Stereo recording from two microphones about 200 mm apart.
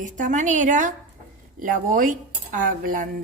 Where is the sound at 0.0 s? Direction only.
40° right (ahead or behind).